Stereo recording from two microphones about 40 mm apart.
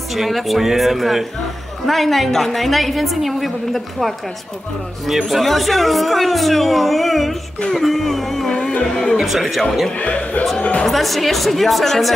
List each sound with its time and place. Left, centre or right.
0.1 s speech: centre
7.7 s a sound: centre
9.2 s speech: centre
9.9 s speech: left
10.9 s speech: centre